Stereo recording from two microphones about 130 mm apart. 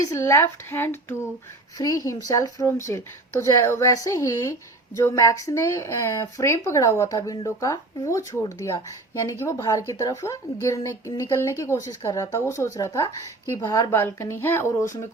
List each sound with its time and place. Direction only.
0.1 s a woman's voice: 20° left (ahead or behind)